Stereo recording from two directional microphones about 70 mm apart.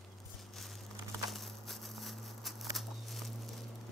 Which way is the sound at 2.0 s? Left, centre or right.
Centre.